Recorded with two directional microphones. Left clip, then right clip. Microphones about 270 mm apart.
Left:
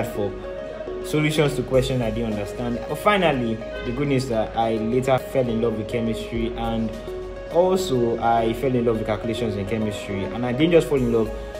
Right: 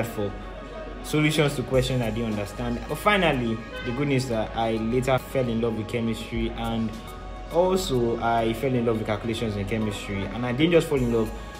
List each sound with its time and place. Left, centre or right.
1.1 s speech: centre